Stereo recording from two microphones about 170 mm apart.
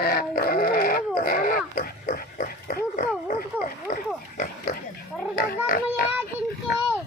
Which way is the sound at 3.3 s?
55° left (ahead or behind).